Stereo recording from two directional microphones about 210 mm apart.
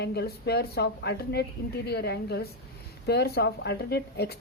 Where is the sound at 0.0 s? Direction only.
50° left (ahead or behind).